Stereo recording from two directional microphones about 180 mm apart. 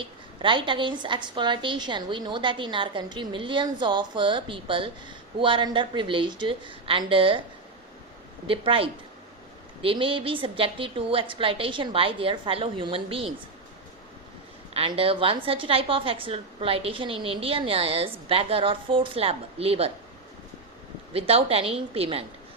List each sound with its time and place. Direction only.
0.0 s a woman's voice: 25° right (ahead or behind)
8.4 s a woman's voice: 30° right (ahead or behind)
14.7 s a woman's voice: 30° right (ahead or behind)
21.1 s a woman's voice: 35° right (ahead or behind)